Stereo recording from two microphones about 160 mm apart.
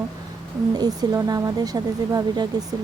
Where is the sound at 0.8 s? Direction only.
25° right (ahead or behind).